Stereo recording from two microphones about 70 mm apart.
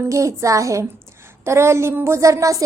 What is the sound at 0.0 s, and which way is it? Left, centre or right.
A woman's voice, right.